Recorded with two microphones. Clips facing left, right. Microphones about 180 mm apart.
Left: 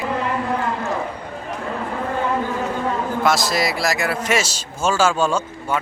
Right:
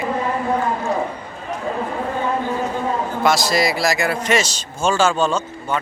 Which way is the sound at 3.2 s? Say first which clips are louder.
Right 3 dB; centre (ahead or behind).